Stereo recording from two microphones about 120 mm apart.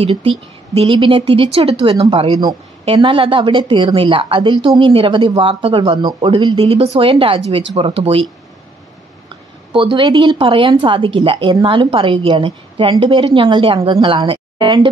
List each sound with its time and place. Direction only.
0.0 s a woman's voice: 50° right (ahead or behind)
6.0 s speech: 40° right (ahead or behind)
6.6 s speech: 55° right (ahead or behind)
9.8 s a woman's voice: 45° right (ahead or behind)